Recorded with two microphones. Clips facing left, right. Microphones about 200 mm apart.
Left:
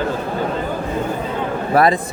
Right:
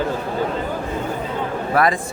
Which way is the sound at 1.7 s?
30° left (ahead or behind).